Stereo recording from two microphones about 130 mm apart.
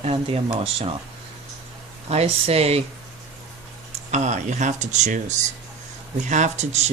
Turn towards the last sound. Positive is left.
turn(degrees=-60)  # may be behind; listen again after turning